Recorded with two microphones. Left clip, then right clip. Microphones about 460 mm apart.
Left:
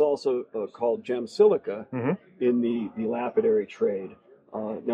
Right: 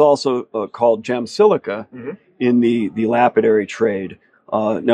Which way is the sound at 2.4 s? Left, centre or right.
Right.